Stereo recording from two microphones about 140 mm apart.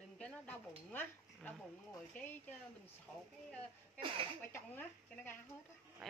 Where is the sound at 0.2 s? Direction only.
10° left (ahead or behind).